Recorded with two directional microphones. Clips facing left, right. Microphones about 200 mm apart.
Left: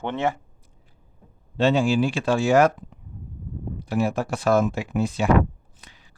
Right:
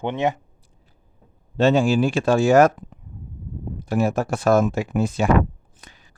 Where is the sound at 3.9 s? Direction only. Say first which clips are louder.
Right 3 dB; 45° right (ahead or behind).